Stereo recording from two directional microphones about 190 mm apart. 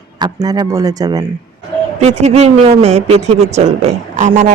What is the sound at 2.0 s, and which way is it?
Speech, 35° right (ahead or behind).